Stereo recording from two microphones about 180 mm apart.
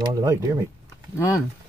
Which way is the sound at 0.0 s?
20° right (ahead or behind).